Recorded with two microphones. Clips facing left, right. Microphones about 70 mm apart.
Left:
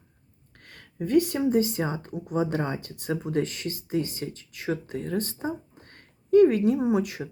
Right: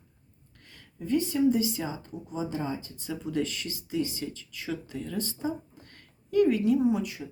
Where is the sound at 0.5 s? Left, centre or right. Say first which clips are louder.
Left 9 dB; left.